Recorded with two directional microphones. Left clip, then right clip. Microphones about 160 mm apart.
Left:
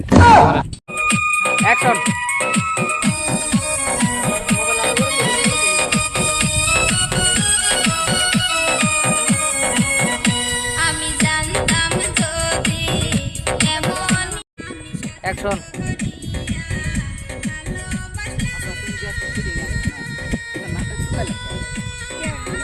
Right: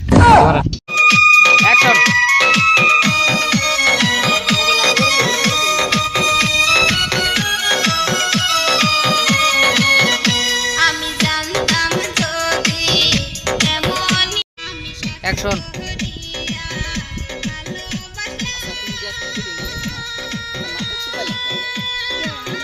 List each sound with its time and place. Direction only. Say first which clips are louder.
0.1 s a sound: even; centre (ahead or behind)
0.9 s music: right 9 dB; 25° right (ahead or behind)
15.2 s music: right 2 dB; 5° left (ahead or behind)
21.2 s music: right 4 dB; 25° right (ahead or behind)